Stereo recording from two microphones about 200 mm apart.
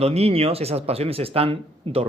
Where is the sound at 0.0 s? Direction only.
30° right (ahead or behind).